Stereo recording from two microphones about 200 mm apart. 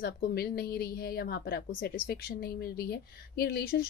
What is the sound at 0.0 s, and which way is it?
A woman's voice, 50° left (ahead or behind).